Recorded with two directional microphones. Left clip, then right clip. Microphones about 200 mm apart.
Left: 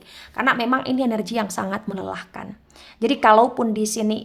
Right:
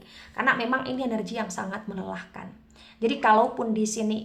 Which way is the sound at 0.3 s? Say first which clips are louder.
Left 4 dB; 35° left (ahead or behind).